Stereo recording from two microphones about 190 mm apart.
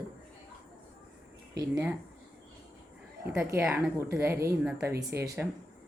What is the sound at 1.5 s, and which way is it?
Speech, 20° right (ahead or behind).